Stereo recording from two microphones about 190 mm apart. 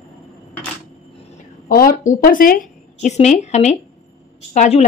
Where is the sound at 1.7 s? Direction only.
50° left (ahead or behind).